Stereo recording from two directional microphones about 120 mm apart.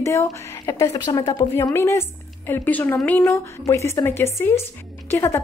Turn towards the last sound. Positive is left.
turn(degrees=20)  # may be behind; listen again after turning